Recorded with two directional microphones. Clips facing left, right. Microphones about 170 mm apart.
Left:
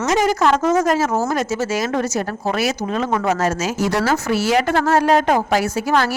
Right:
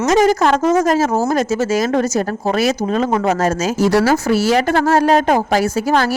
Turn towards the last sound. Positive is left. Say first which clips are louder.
# right 3 dB
turn(degrees=-35)  # may be behind; listen again after turning